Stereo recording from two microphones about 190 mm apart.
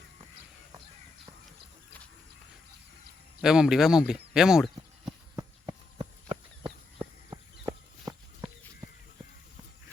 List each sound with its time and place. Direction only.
3.4 s speech: 5° right (ahead or behind)
6.0 s horse: 30° right (ahead or behind)
7.0 s walk: 15° right (ahead or behind)